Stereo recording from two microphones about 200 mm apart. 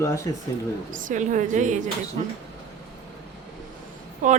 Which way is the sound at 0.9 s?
40° right (ahead or behind).